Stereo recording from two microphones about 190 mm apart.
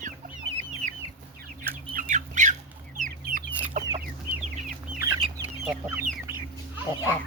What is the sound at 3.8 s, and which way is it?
Chicken, 40° right (ahead or behind).